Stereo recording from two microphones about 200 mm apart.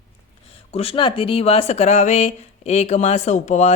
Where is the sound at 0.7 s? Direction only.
30° left (ahead or behind).